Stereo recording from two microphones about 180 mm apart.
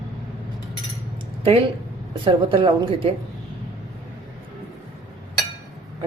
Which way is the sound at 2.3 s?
30° right (ahead or behind).